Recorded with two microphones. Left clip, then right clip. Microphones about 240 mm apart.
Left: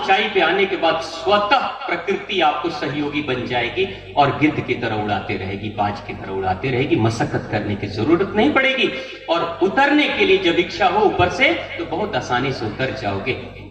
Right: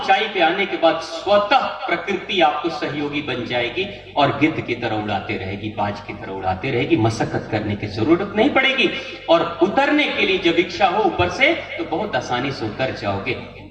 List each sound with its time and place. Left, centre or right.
0.0 s a man's voice: right
6.7 s a man's voice: right